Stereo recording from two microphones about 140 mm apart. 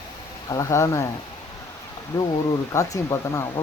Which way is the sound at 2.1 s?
25° left (ahead or behind).